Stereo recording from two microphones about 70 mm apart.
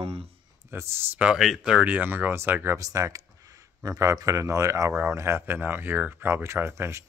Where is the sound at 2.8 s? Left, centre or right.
Right.